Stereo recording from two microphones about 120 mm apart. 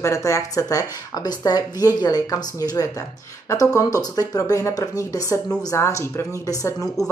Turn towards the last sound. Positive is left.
turn(degrees=30)  # may be behind; listen again after turning